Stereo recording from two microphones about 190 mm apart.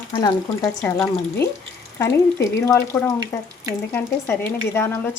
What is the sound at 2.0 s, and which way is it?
Speech, 15° left (ahead or behind).